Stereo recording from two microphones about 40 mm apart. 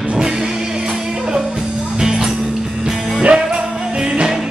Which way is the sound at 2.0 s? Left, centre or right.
Centre.